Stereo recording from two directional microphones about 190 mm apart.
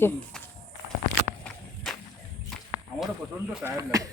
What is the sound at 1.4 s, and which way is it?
Walk, 5° left (ahead or behind).